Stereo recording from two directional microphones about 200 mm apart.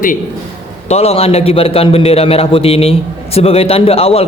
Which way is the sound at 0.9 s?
30° left (ahead or behind).